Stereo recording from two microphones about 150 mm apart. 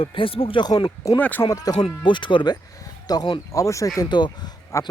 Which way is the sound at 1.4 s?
25° left (ahead or behind).